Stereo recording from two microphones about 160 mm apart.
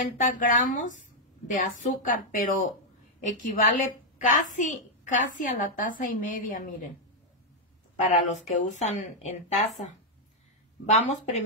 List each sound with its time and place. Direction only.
0.0 s a woman's voice: 50° left (ahead or behind)
7.9 s speech: 45° left (ahead or behind)
9.6 s speech: centre (ahead or behind)
10.9 s speech: 45° left (ahead or behind)